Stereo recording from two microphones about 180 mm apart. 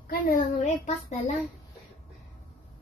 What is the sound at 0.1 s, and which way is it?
A woman's voice, 50° left (ahead or behind).